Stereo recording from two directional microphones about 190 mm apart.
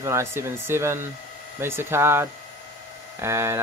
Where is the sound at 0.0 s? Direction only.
15° right (ahead or behind).